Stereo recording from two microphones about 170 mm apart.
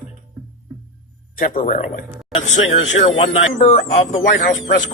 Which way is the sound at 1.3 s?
50° left (ahead or behind).